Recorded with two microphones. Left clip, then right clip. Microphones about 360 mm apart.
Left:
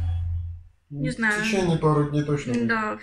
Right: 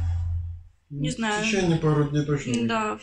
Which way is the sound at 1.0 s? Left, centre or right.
Centre.